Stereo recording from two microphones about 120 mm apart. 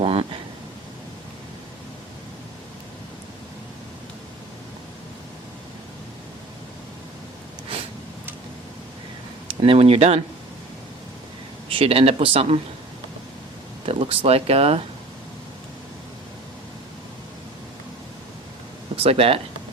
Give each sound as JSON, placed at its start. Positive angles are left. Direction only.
{"t": 0.0, "sound": "a sound", "side_deg": -50}
{"t": 9.5, "sound": "speech", "side_deg": -50}
{"t": 11.7, "sound": "speech", "side_deg": -50}
{"t": 13.8, "sound": "speech", "side_deg": -55}
{"t": 19.0, "sound": "speech", "side_deg": -50}